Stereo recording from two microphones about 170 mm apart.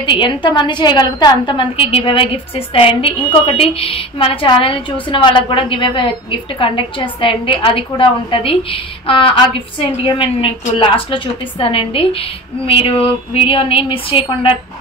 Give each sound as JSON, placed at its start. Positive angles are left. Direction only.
{"t": 0.0, "sound": "a woman's voice", "side_deg": 30}